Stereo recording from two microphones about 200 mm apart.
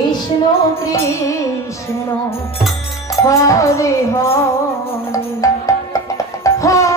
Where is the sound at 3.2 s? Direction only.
15° left (ahead or behind).